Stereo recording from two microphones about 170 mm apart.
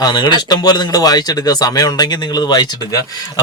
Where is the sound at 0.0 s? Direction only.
25° left (ahead or behind).